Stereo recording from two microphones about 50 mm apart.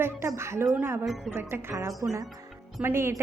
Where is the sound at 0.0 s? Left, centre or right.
Right.